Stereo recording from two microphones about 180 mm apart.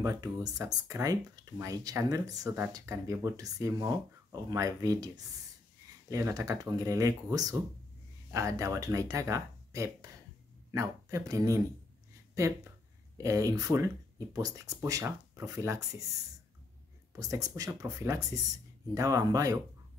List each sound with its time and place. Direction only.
0.0 s speech: 20° right (ahead or behind)
17.1 s speech: 20° right (ahead or behind)